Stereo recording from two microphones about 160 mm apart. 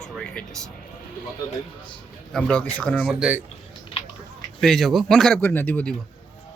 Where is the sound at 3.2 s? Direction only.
10° right (ahead or behind).